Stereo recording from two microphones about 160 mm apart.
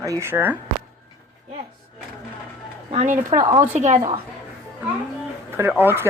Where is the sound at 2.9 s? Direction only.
45° right (ahead or behind).